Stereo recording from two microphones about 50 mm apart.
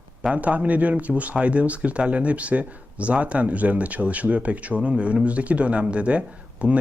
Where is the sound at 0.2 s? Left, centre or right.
Right.